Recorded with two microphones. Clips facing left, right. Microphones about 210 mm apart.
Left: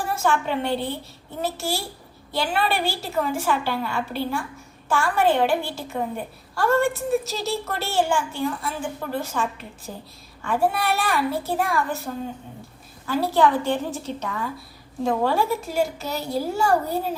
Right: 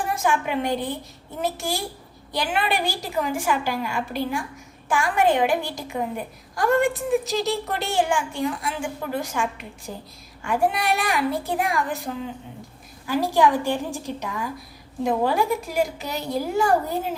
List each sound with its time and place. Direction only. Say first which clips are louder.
0.3 s a woman's voice: left 1 dB; 15° right (ahead or behind)
13.1 s a woman's voice: even; 15° right (ahead or behind)